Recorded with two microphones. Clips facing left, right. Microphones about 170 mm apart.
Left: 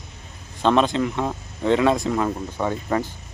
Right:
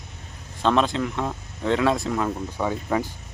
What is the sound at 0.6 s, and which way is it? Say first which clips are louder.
Speech: left 3 dB; centre (ahead or behind).